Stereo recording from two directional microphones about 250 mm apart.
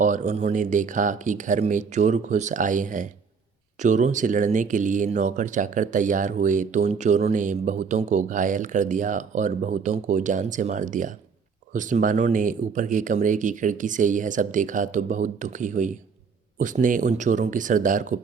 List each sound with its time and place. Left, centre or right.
0.0 s speech: right